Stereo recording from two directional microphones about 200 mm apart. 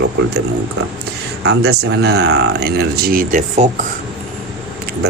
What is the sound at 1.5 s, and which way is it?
Speech, 55° right (ahead or behind).